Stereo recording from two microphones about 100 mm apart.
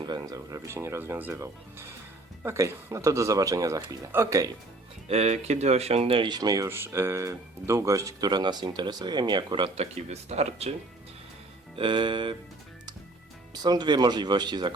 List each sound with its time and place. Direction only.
0.0 s speech: 45° right (ahead or behind)
5.0 s speech: 90° right
6.2 s speech: 45° right (ahead or behind)
6.7 s speech: 25° right (ahead or behind); by 9.6 s 50° right (ahead or behind)
9.7 s speech: 90° right
11.8 s music: 55° right (ahead or behind)
13.5 s speech: 45° right (ahead or behind)